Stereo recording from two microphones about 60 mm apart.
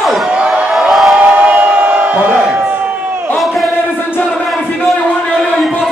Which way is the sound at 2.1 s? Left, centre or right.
Right.